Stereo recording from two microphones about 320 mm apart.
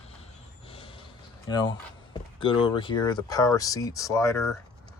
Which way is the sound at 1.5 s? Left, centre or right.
Centre.